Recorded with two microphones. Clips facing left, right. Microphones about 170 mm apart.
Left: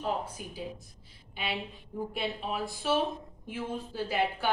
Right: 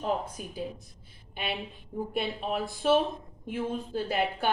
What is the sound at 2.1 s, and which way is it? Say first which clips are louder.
A woman's voice: right 4 dB; 55° right (ahead or behind).